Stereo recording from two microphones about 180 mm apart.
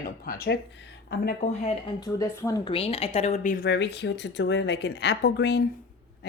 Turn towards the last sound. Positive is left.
turn(degrees=65)  # may be behind; listen again after turning